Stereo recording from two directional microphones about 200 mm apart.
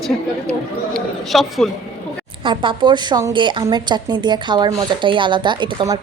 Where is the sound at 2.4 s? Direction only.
25° right (ahead or behind).